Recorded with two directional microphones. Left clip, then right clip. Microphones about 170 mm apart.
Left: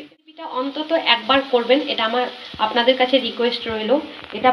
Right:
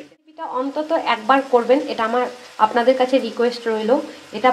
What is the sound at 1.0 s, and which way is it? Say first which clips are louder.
Speech: left 1 dB; 45° right (ahead or behind).